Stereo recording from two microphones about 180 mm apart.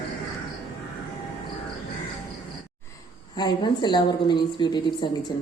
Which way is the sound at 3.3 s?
25° left (ahead or behind).